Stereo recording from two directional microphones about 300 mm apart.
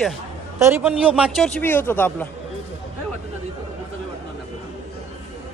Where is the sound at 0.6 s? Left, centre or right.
Centre.